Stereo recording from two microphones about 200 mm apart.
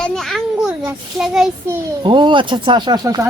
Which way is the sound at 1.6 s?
25° right (ahead or behind).